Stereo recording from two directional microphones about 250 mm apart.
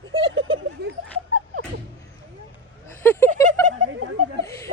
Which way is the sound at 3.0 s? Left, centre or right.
Centre.